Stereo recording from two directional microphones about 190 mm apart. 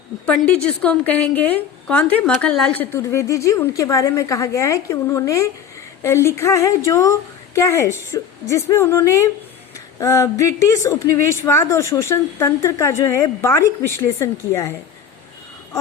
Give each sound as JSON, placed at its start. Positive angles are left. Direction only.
{"t": 0.3, "sound": "a woman's voice", "side_deg": 5}